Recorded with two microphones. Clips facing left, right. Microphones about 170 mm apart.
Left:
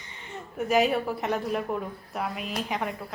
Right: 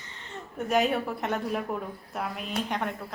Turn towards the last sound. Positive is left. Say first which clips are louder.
# even
turn(degrees=0)  # may be behind; listen again after turning